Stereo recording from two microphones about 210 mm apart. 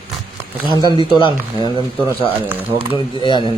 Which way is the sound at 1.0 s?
25° left (ahead or behind).